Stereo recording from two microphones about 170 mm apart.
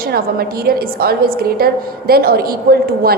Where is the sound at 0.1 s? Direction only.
65° right (ahead or behind).